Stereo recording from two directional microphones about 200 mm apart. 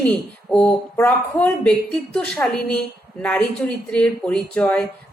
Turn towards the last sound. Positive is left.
turn(degrees=5)  # may be behind; listen again after turning